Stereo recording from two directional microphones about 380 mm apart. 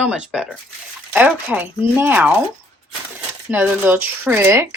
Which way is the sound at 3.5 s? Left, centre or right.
Centre.